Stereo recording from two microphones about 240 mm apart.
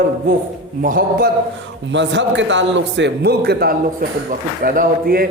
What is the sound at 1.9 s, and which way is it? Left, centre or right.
A man's voice, right.